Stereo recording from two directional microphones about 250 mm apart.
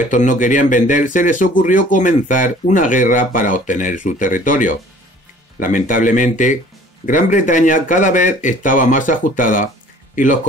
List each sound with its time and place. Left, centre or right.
0.0 s speech: left